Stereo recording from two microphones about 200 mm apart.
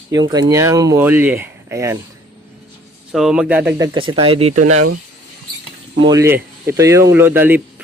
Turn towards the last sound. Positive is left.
turn(degrees=-10)  # may be behind; listen again after turning